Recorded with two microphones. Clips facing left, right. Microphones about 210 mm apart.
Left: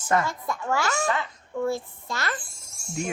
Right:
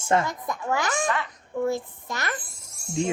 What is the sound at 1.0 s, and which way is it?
Speech, 25° left (ahead or behind).